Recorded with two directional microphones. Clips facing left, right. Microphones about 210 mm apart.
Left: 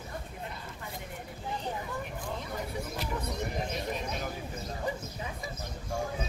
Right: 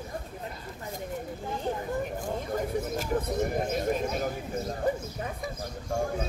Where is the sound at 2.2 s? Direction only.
45° right (ahead or behind).